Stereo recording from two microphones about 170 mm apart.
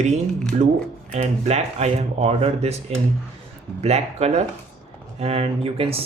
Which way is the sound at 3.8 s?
40° right (ahead or behind).